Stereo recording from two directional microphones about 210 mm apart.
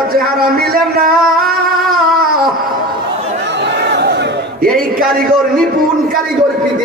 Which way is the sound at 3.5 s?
55° right (ahead or behind).